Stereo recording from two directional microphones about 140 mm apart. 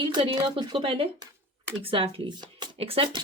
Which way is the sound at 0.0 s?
35° right (ahead or behind).